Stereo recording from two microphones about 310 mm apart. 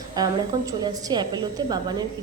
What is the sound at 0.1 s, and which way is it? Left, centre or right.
A woman's voice, centre.